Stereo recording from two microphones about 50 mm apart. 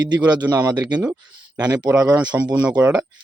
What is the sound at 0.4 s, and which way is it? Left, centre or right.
Speech, right.